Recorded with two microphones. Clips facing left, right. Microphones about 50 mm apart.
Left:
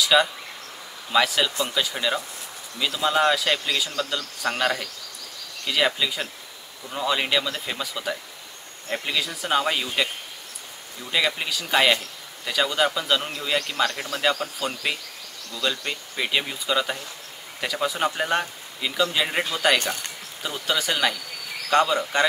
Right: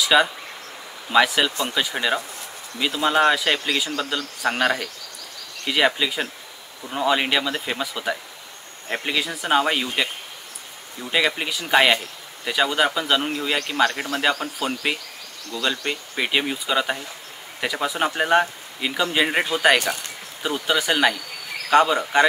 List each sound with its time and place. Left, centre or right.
0.0 s a man's voice: centre
11.1 s a man's voice: centre